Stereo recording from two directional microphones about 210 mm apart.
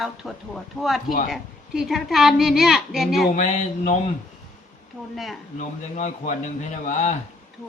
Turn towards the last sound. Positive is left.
turn(degrees=35)  # may be behind; listen again after turning